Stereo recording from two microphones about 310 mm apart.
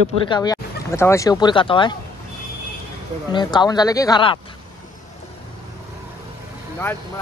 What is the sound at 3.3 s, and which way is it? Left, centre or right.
Speech, centre.